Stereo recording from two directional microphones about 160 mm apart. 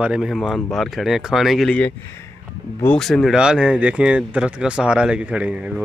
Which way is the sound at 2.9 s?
Centre (ahead or behind).